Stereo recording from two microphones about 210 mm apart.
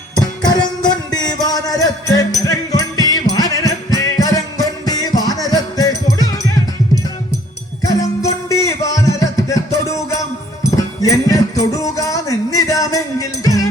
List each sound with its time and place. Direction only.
0.2 s music: 20° left (ahead or behind)